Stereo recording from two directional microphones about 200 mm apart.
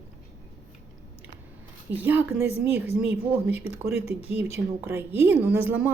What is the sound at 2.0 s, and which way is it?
A woman's voice, 10° right (ahead or behind).